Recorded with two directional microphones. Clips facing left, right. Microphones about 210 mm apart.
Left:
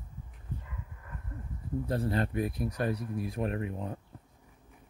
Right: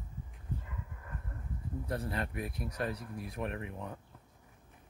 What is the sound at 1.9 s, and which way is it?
Speech, 30° left (ahead or behind).